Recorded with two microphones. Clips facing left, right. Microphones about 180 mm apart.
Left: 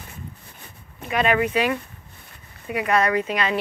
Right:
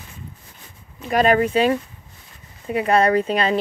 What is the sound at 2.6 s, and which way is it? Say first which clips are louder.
Speech: right 4 dB; 30° right (ahead or behind).